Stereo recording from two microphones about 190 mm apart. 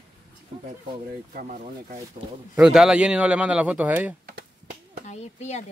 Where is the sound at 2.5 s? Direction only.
5° right (ahead or behind).